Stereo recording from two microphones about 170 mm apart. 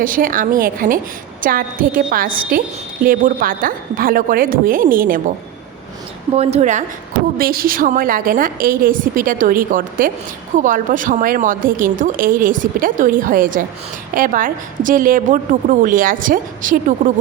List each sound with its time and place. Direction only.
0.0 s a woman's voice: 55° right (ahead or behind)
6.3 s a woman's voice: 40° right (ahead or behind)
7.3 s a woman's voice: 60° right (ahead or behind)